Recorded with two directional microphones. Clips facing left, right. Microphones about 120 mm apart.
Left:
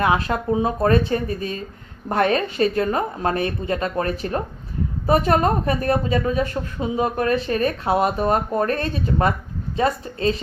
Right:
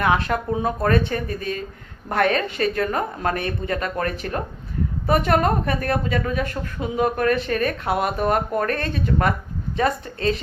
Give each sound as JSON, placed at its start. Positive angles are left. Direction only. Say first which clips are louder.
{"t": 0.0, "sound": "speech", "louder": "left 1 dB", "side_deg": 25}